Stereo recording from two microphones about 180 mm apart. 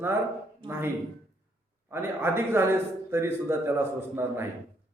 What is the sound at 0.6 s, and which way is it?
Speech, 30° right (ahead or behind).